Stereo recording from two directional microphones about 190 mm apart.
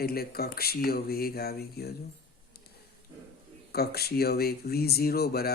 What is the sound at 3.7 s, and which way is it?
Speech, 55° left (ahead or behind).